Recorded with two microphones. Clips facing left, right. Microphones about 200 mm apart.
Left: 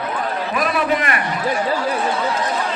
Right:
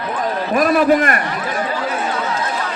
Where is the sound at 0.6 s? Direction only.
45° right (ahead or behind).